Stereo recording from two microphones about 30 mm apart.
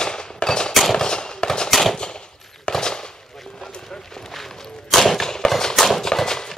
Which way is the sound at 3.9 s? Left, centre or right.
Centre.